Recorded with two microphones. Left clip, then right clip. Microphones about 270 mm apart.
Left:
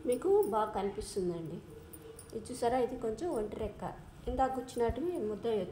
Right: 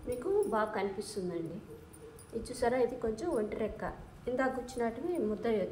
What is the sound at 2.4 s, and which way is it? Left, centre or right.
A woman's voice, left.